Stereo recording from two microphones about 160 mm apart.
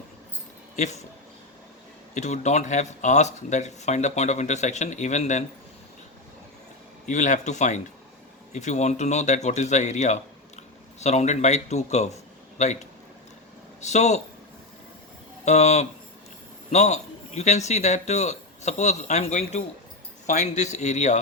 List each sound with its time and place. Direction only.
0.8 s speech: 45° left (ahead or behind)
2.1 s speech: 45° left (ahead or behind)
7.0 s speech: 50° left (ahead or behind)
13.8 s speech: 45° left (ahead or behind)
15.4 s a man's voice: 45° left (ahead or behind)